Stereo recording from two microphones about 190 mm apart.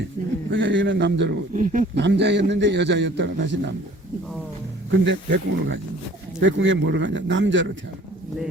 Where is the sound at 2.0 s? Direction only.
65° right (ahead or behind).